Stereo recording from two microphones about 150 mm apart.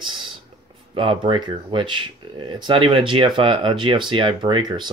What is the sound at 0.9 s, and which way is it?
Speech, 35° right (ahead or behind).